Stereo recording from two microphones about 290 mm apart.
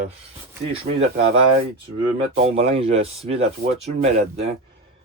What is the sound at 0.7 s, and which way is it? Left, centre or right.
Speech, right.